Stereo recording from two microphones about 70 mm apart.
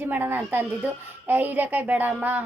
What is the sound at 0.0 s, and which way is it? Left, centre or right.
A woman's voice, right.